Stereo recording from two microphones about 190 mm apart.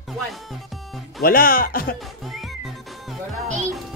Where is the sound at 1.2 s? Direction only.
50° left (ahead or behind).